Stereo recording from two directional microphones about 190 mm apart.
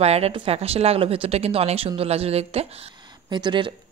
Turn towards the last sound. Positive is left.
turn(degrees=-25)  # may be behind; listen again after turning